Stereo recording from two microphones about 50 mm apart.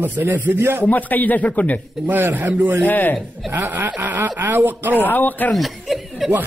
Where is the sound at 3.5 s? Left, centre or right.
Right.